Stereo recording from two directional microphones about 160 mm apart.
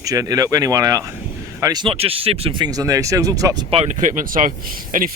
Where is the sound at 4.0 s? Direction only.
55° right (ahead or behind).